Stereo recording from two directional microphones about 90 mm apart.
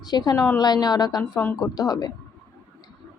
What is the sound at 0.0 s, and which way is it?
A woman's voice, 50° left (ahead or behind).